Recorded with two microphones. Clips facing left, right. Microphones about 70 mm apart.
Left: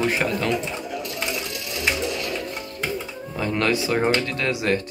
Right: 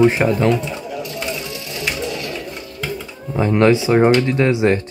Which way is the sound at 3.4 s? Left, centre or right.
Right.